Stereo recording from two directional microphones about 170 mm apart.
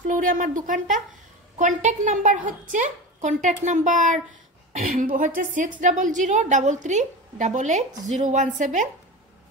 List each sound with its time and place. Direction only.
0.1 s a woman's voice: 50° right (ahead or behind)